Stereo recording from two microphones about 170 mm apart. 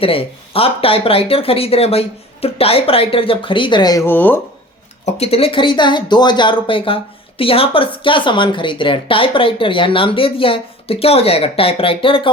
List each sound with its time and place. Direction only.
0.0 s speech: 35° left (ahead or behind); by 4.4 s 10° left (ahead or behind)
5.0 s speech: 40° left (ahead or behind)